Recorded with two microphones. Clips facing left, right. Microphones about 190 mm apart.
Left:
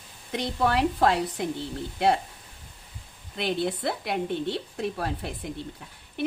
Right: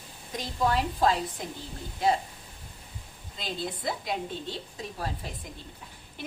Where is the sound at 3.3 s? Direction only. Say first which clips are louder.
Left 8 dB; 65° left (ahead or behind).